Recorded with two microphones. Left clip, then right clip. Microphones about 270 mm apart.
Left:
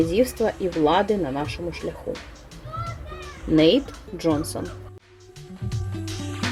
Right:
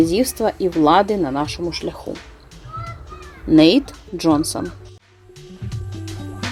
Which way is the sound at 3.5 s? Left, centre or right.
Right.